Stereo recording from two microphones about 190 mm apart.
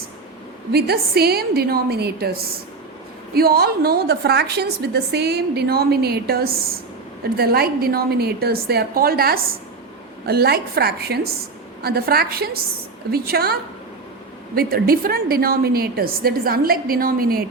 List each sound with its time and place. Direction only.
0.7 s a woman's voice: 55° right (ahead or behind)